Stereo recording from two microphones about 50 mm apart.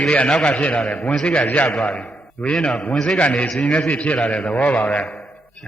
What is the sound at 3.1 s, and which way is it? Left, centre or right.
Speech, left.